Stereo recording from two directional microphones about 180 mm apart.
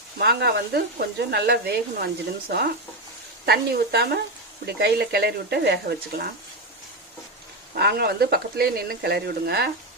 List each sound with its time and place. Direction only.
0.2 s speech: 65° right (ahead or behind)
3.4 s speech: 60° right (ahead or behind)
7.8 s speech: 65° right (ahead or behind)